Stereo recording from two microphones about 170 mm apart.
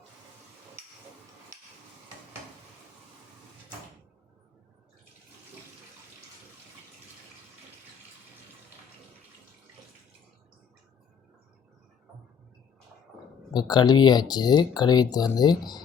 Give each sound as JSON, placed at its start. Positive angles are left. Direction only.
{"t": 13.5, "sound": "speech", "side_deg": 25}